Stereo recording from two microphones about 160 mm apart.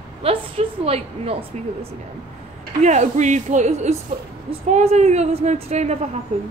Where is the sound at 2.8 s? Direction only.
45° right (ahead or behind).